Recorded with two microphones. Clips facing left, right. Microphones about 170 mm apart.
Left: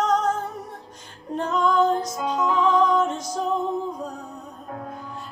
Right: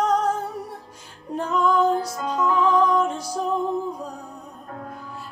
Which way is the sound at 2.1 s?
10° left (ahead or behind).